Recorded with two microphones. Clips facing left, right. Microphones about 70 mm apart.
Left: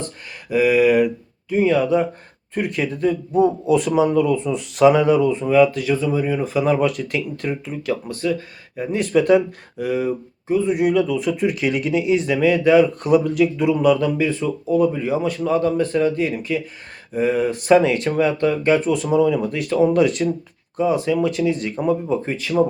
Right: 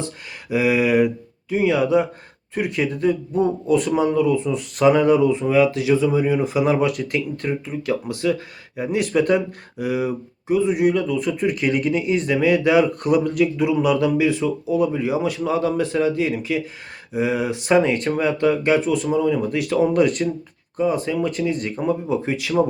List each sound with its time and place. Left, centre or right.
0.5 s speech: centre
5.9 s speech: centre
8.1 s speech: centre